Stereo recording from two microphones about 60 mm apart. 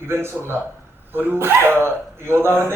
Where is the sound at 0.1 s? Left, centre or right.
Right.